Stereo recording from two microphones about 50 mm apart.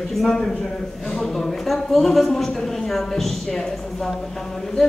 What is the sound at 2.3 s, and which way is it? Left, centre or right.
A woman's voice, centre.